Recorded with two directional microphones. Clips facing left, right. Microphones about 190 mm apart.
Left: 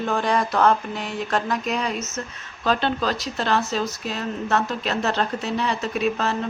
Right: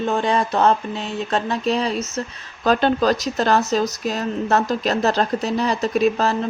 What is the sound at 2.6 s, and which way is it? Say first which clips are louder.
Speech: right 6 dB; 45° right (ahead or behind).